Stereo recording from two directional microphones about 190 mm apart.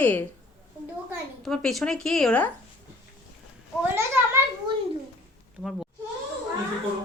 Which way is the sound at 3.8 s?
15° right (ahead or behind).